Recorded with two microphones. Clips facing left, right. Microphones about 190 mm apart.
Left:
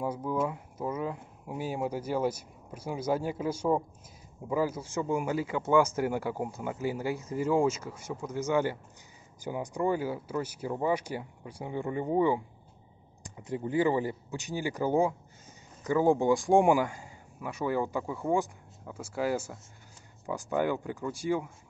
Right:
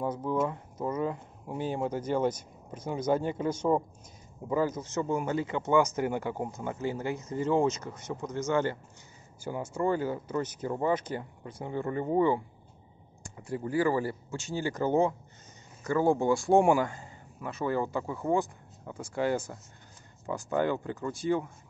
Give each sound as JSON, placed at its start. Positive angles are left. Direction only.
{"t": 0.0, "sound": "speech", "side_deg": 10}